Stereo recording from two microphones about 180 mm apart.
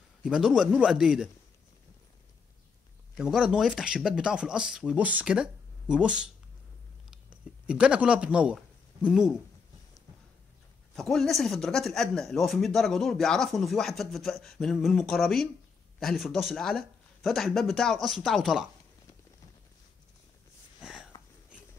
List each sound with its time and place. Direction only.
0.2 s speech: 5° right (ahead or behind)
3.2 s speech: centre (ahead or behind)
11.0 s speech: centre (ahead or behind)
20.8 s wheeze: 5° right (ahead or behind)